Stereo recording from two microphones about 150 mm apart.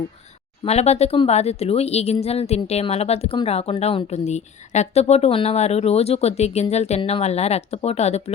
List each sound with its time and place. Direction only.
0.6 s speech: 45° left (ahead or behind)